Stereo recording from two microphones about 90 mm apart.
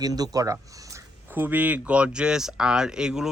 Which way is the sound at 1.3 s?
20° right (ahead or behind).